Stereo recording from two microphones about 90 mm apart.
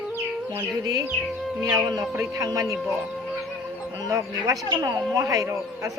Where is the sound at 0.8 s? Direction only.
40° right (ahead or behind).